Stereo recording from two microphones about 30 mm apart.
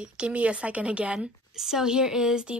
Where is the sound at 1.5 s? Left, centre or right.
Centre.